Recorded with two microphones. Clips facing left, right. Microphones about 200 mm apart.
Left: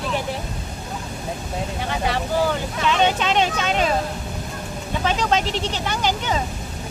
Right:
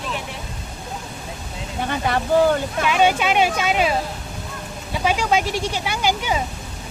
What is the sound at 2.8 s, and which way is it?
Speech, 10° right (ahead or behind).